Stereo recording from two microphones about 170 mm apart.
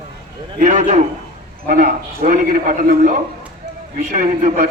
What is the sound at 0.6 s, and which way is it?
A man's voice, 45° right (ahead or behind).